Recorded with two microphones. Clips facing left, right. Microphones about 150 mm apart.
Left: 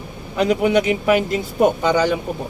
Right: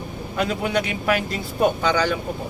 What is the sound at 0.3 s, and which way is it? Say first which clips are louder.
Speech: left 7 dB; 20° left (ahead or behind).